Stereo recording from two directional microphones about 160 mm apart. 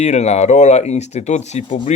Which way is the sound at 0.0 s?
45° left (ahead or behind).